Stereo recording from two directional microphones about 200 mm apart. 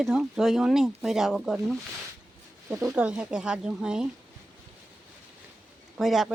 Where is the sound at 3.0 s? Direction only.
5° right (ahead or behind).